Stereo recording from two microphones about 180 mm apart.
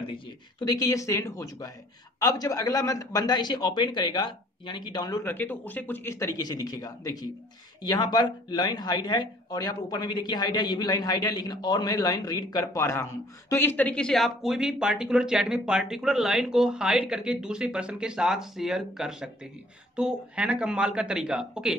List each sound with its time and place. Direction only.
0.7 s a man's voice: 20° left (ahead or behind)
5.2 s speech: 10° left (ahead or behind)